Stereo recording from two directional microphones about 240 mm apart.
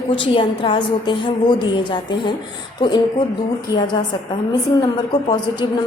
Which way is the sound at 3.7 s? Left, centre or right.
Centre.